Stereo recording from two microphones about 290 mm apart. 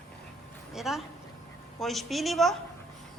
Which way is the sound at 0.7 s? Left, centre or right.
Centre.